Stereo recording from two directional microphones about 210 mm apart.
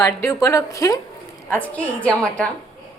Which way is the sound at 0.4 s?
15° left (ahead or behind).